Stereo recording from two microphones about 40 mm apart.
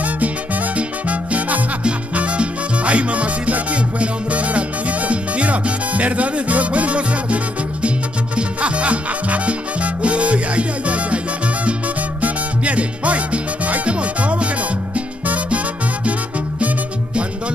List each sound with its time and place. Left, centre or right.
0.0 s music: right
8.4 s salsa music: right
12.2 s music: right